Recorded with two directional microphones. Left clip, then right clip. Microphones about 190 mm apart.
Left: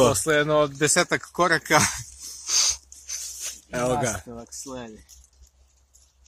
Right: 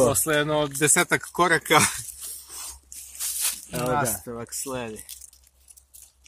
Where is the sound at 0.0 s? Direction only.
10° left (ahead or behind).